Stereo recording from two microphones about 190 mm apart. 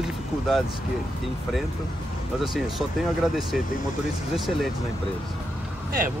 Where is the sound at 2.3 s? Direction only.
Centre (ahead or behind).